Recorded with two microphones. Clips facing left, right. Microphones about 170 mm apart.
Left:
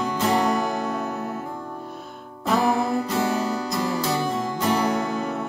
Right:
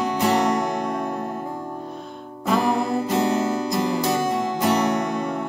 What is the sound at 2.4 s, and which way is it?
Music, centre (ahead or behind).